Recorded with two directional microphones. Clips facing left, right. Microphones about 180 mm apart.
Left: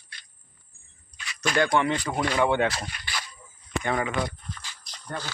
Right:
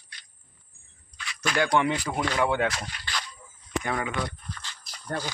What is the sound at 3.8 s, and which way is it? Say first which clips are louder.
Speech: left 4 dB; centre (ahead or behind).